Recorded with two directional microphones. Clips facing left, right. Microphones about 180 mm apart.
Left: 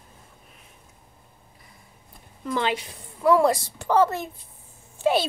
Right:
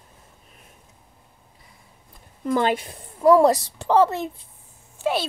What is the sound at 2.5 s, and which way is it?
A woman's voice, 45° right (ahead or behind).